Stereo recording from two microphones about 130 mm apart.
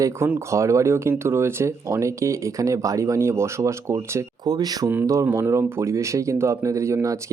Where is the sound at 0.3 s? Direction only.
20° right (ahead or behind).